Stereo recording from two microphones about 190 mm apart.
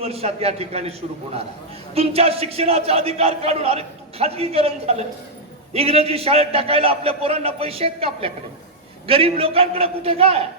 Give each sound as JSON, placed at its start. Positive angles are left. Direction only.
{"t": 0.0, "sound": "speech", "side_deg": -30}